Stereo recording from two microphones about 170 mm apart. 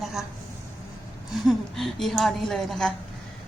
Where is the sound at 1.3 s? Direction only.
Centre (ahead or behind).